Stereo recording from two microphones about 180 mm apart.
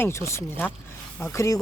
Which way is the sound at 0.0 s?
15° left (ahead or behind).